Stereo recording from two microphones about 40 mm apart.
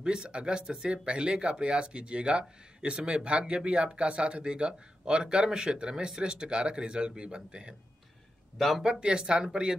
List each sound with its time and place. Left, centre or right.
0.0 s a man's voice: right
8.8 s a man's voice: right